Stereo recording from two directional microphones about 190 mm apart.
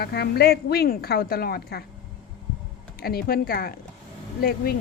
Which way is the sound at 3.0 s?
55° left (ahead or behind).